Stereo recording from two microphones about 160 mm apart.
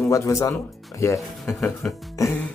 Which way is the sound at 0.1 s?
20° left (ahead or behind).